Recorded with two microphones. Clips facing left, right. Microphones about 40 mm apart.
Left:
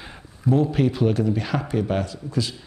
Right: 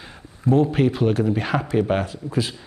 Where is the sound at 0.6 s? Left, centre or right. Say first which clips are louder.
Right 1 dB; centre.